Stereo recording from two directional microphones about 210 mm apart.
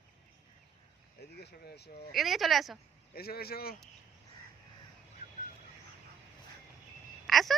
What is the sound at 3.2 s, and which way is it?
Speech, 45° left (ahead or behind).